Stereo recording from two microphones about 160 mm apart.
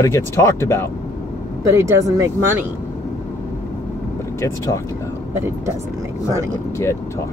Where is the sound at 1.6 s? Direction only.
20° right (ahead or behind).